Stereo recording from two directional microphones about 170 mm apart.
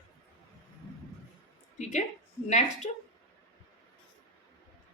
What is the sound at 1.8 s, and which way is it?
A woman's voice, 45° left (ahead or behind).